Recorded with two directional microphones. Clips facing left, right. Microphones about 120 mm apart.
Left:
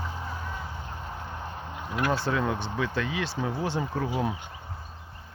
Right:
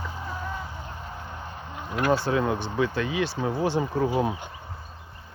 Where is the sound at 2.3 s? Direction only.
15° right (ahead or behind).